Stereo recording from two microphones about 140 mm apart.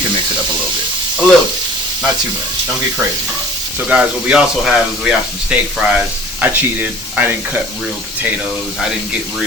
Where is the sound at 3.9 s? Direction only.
10° right (ahead or behind).